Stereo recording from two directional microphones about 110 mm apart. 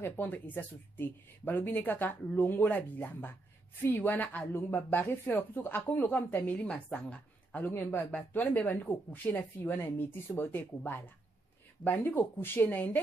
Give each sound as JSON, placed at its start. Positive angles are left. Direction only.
{"t": 0.0, "sound": "a woman's voice", "side_deg": 20}